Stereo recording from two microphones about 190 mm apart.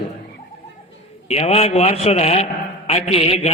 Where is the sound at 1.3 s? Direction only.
35° left (ahead or behind).